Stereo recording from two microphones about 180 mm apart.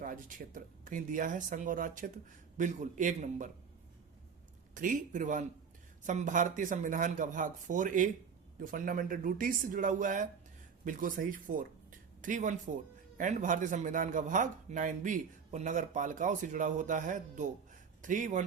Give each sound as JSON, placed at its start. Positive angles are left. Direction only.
{"t": 0.0, "sound": "a man's voice", "side_deg": -45}
{"t": 4.7, "sound": "a man's voice", "side_deg": -45}